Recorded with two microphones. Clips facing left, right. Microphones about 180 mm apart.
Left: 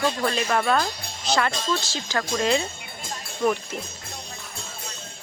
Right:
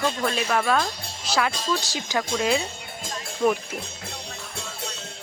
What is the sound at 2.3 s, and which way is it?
Speech, 5° right (ahead or behind).